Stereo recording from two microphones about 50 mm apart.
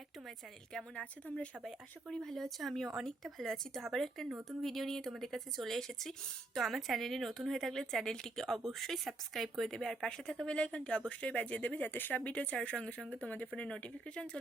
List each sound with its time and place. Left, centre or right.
1.6 s speech: centre; by 12.2 s left
12.2 s speech: left
13.5 s speech: centre